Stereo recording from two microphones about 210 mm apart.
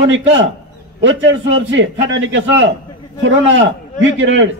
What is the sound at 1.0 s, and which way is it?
A man's voice, 60° right (ahead or behind).